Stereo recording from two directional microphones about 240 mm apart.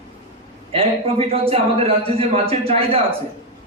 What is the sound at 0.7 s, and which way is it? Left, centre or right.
A man's voice, right.